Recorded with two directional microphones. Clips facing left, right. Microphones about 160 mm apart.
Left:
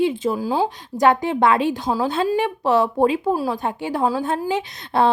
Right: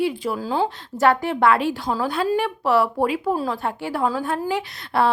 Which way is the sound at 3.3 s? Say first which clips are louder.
Left 2 dB; 10° left (ahead or behind).